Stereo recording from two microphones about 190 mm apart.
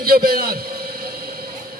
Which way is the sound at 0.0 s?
50° right (ahead or behind).